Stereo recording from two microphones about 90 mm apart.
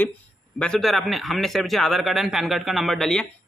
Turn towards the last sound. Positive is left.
turn(degrees=5)  # may be behind; listen again after turning